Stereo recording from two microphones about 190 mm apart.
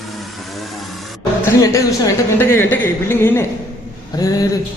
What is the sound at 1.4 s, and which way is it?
A woman's voice, 15° left (ahead or behind).